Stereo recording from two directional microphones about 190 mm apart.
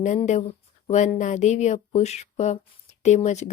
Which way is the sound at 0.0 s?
40° left (ahead or behind).